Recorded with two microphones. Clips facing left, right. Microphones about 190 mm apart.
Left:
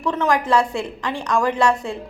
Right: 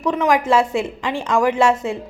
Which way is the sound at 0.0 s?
20° right (ahead or behind).